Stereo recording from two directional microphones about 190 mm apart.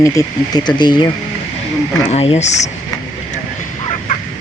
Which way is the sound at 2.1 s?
35° left (ahead or behind).